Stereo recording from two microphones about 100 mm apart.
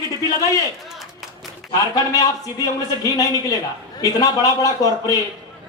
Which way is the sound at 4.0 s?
40° left (ahead or behind).